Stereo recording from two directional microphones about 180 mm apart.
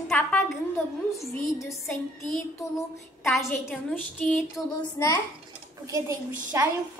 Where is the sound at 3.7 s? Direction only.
10° left (ahead or behind).